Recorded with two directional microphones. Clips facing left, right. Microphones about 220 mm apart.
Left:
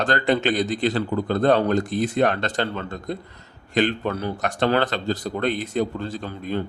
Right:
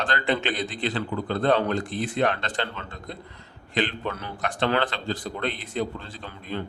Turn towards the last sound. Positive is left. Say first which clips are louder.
# left 6 dB
turn(degrees=45)  # may be behind; listen again after turning